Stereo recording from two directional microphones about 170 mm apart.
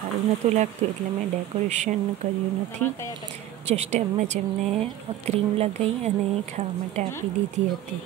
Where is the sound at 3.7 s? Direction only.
40° right (ahead or behind).